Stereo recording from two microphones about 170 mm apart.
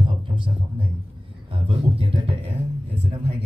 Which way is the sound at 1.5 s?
30° right (ahead or behind).